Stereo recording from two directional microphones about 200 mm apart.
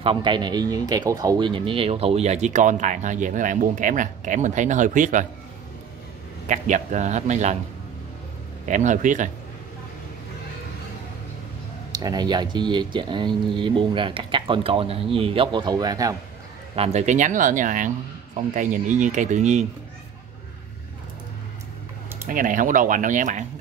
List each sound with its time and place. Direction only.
0.0 s speech: 25° right (ahead or behind); by 5.2 s 40° right (ahead or behind)
6.4 s speech: 35° right (ahead or behind)
8.6 s speech: 35° right (ahead or behind)
11.9 s speech: 20° right (ahead or behind)
16.7 s speech: 30° right (ahead or behind)
22.3 s speech: 40° right (ahead or behind)